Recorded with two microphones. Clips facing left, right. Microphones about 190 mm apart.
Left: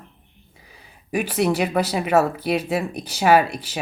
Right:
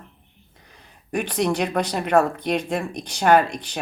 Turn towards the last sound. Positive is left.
turn(degrees=5)  # may be behind; listen again after turning